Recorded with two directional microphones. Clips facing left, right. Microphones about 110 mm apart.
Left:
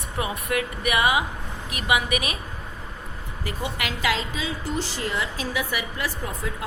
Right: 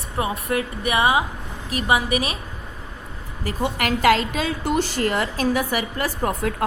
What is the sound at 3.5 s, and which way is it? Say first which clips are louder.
A woman's voice: right 7 dB; 50° right (ahead or behind).